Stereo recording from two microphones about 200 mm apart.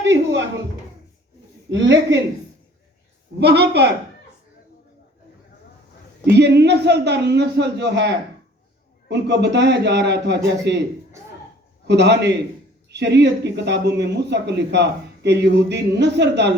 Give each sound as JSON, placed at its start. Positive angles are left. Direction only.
{"t": 0.0, "sound": "a sound", "side_deg": -60}
{"t": 1.7, "sound": "speech", "side_deg": -65}
{"t": 3.4, "sound": "speech", "side_deg": -55}
{"t": 6.2, "sound": "speech", "side_deg": -55}
{"t": 11.9, "sound": "speech", "side_deg": -60}